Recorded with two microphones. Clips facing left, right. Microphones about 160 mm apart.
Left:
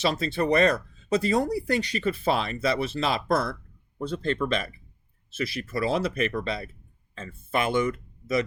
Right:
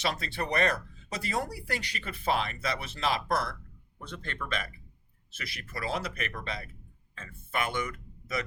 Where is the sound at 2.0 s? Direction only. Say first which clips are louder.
Left 4 dB; 35° left (ahead or behind).